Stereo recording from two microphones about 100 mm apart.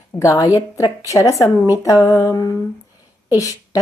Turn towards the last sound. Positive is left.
turn(degrees=35)  # may be behind; listen again after turning